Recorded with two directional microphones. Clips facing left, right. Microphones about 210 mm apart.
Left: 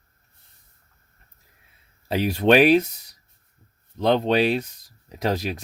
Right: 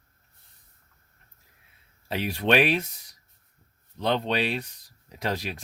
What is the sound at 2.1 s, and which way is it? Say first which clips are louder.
Speech: left 6 dB; 40° left (ahead or behind).